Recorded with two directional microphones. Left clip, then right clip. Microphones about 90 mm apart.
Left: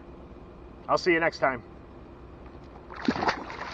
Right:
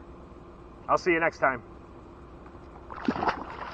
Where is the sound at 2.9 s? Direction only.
40° left (ahead or behind).